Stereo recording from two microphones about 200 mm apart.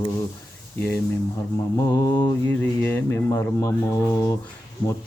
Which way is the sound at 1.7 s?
20° left (ahead or behind).